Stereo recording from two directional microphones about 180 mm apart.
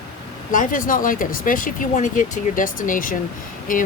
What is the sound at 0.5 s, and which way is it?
Speech, 50° left (ahead or behind).